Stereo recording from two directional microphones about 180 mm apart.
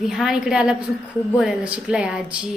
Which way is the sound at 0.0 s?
Centre (ahead or behind).